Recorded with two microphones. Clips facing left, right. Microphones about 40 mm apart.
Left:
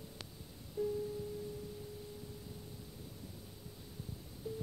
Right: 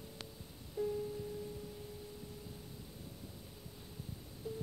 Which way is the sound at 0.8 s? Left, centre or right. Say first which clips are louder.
Even; right.